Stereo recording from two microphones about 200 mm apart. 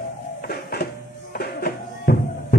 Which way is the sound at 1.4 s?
50° left (ahead or behind).